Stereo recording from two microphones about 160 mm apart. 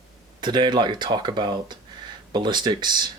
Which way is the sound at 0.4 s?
30° right (ahead or behind).